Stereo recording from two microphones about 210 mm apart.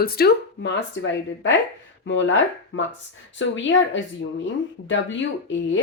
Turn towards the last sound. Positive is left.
turn(degrees=65)  # may be behind; listen again after turning